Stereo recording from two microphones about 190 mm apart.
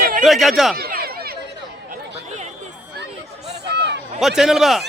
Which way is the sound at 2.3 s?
40° right (ahead or behind).